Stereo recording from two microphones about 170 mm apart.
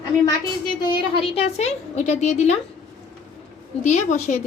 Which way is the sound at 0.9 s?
30° left (ahead or behind).